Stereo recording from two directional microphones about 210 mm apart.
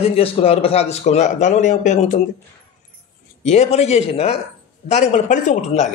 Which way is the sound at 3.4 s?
30° left (ahead or behind).